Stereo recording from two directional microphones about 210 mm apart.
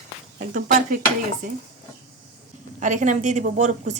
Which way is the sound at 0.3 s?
35° right (ahead or behind).